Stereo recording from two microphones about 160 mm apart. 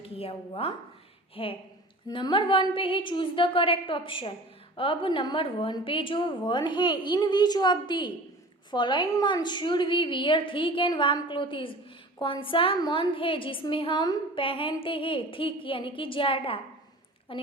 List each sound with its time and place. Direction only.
0.0 s a woman's voice: 35° left (ahead or behind)